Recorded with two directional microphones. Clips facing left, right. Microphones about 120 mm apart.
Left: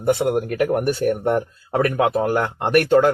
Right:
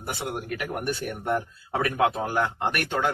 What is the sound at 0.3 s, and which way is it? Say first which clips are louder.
Speech: left 12 dB; 50° left (ahead or behind).